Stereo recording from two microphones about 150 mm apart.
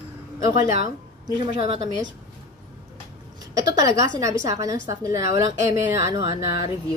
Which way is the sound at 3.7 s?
20° right (ahead or behind).